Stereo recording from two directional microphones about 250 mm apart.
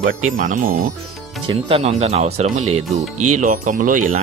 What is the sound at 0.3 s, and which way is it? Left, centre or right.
Speech, right.